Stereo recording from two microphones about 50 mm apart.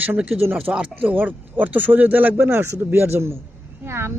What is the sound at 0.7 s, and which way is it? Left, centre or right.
Speech, right.